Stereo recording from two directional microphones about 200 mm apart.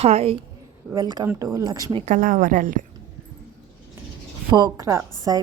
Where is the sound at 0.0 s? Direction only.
30° right (ahead or behind).